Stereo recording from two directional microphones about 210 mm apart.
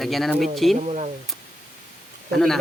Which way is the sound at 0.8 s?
35° right (ahead or behind).